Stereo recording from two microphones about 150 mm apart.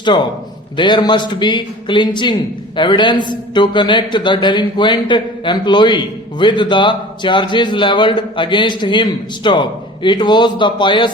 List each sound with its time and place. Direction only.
0.0 s a man's voice: 30° left (ahead or behind)